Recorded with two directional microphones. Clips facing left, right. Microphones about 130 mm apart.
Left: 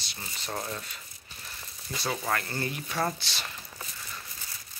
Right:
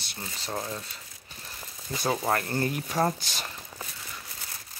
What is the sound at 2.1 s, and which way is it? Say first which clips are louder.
Speech: right 4 dB; 35° right (ahead or behind).